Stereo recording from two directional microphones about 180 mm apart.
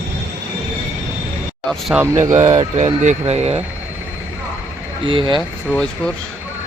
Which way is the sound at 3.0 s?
40° right (ahead or behind).